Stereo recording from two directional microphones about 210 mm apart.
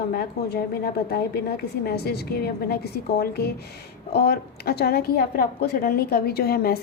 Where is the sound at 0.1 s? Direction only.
50° left (ahead or behind).